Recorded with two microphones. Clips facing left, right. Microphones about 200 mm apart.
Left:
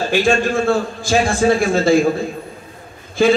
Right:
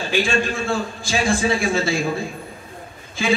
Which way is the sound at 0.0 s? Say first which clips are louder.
Left 5 dB; 50° left (ahead or behind).